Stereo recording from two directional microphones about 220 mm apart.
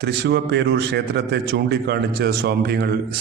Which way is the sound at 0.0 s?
50° right (ahead or behind).